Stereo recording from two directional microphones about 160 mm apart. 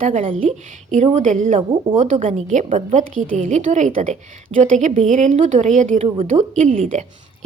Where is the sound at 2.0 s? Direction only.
50° right (ahead or behind).